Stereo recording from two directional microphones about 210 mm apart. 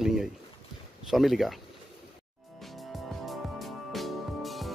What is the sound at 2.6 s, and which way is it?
Music, centre (ahead or behind).